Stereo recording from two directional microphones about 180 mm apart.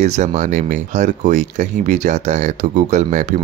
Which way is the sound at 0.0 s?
40° right (ahead or behind).